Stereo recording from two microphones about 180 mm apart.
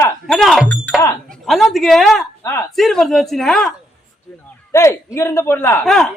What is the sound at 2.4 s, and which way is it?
Speech, 15° left (ahead or behind).